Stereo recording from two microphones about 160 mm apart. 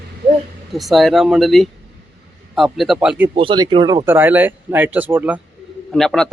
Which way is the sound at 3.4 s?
30° right (ahead or behind).